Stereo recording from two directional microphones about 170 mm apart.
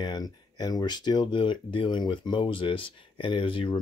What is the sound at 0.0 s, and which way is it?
Speech, 25° left (ahead or behind).